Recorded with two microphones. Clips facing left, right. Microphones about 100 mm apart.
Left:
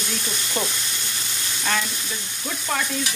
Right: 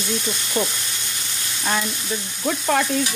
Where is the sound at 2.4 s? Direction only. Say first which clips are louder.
Right 7 dB; 55° right (ahead or behind).